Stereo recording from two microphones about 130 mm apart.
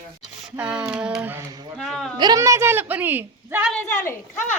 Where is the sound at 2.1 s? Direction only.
35° right (ahead or behind).